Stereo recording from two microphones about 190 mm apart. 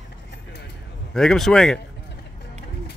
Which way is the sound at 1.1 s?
Centre (ahead or behind).